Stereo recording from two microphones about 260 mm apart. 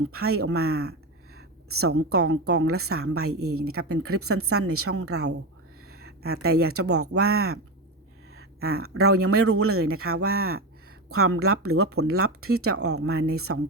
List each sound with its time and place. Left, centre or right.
0.1 s a woman's voice: right